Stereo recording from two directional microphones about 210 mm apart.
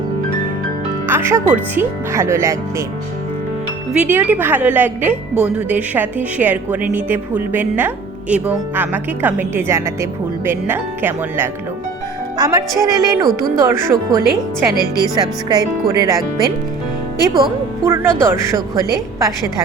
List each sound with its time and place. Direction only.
1.0 s a woman's voice: 10° right (ahead or behind)
3.9 s a woman's voice: 10° right (ahead or behind)